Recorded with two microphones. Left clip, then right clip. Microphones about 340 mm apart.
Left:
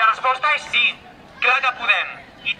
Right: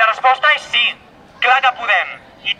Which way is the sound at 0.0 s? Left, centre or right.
Centre.